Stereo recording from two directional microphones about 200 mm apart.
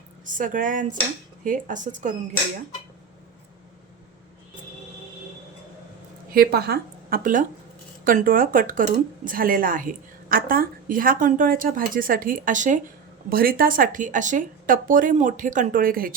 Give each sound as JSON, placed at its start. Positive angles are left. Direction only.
{"t": 0.3, "sound": "speech", "side_deg": -40}
{"t": 6.3, "sound": "speech", "side_deg": -50}